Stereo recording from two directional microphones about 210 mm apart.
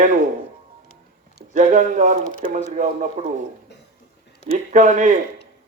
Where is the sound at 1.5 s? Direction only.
35° right (ahead or behind).